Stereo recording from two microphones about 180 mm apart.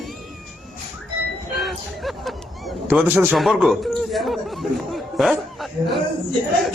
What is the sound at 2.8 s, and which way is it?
Speech, 10° right (ahead or behind).